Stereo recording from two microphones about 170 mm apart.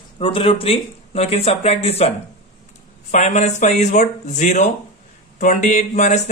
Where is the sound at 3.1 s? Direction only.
45° left (ahead or behind).